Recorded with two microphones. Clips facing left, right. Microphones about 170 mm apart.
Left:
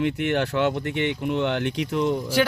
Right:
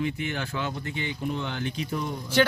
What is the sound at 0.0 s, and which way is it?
Speech, 70° left (ahead or behind).